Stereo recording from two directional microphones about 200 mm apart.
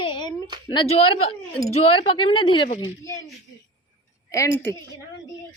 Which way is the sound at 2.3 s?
25° left (ahead or behind).